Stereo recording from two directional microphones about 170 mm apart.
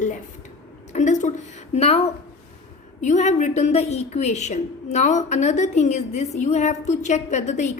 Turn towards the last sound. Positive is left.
turn(degrees=45)  # may be behind; listen again after turning